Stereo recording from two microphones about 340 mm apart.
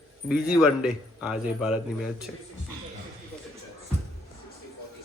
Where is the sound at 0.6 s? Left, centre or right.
Centre.